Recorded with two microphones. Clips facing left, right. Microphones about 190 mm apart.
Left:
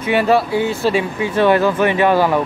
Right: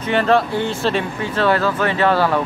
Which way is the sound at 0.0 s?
10° left (ahead or behind).